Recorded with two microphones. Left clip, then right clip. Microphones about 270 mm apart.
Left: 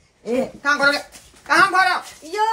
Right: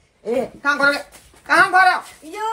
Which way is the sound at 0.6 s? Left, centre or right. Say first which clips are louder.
Even; centre.